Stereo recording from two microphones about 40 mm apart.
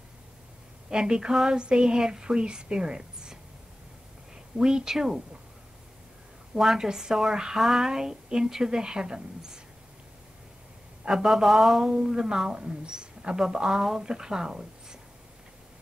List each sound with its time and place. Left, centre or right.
0.8 s a woman's voice: centre
4.6 s speech: centre
6.6 s speech: centre
11.1 s speech: centre
11.8 s speech: centre